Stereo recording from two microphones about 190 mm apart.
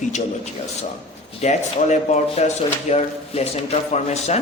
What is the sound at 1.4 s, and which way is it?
Speech, 35° left (ahead or behind).